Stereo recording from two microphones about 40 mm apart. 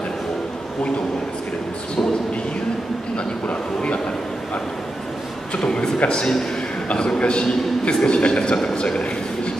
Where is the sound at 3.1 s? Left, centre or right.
Left.